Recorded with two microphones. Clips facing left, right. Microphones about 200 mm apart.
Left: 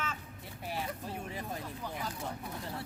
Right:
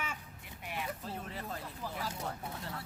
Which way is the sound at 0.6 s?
35° left (ahead or behind).